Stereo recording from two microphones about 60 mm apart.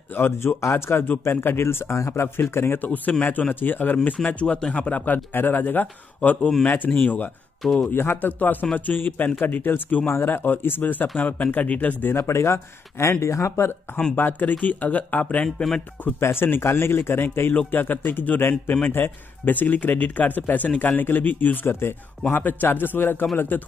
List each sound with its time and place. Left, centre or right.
0.1 s a man's voice: left
0.6 s speech: left
2.2 s a man's voice: left
2.8 s speech: left
4.9 s a man's voice: left
7.6 s speech: centre
7.9 s a man's voice: left
12.0 s speech: left
14.1 s speech: left
15.4 s speech: centre
16.2 s a man's voice: left
21.6 s a man's voice: left